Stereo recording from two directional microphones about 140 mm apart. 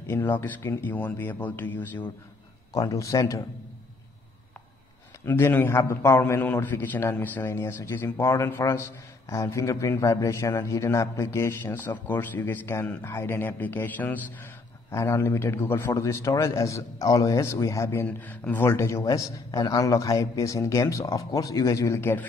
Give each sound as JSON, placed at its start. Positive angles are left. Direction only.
{"t": 0.0, "sound": "a man's voice", "side_deg": 15}
{"t": 2.7, "sound": "a man's voice", "side_deg": 25}
{"t": 5.2, "sound": "a man's voice", "side_deg": 15}